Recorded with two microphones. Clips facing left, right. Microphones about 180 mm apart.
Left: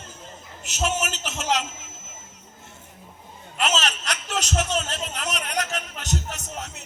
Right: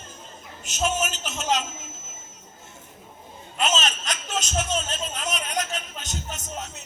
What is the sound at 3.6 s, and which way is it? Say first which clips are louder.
A man's voice: even; 70° left (ahead or behind).